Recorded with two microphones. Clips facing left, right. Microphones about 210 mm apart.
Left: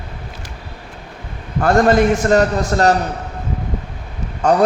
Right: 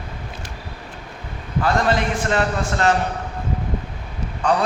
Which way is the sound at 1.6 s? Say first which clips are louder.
Left 7 dB; 50° left (ahead or behind).